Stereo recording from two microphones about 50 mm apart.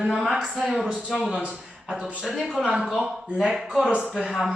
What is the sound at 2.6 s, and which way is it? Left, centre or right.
Speech, centre.